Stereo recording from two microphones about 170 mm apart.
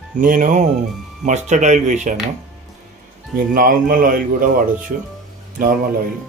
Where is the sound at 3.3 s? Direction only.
55° right (ahead or behind).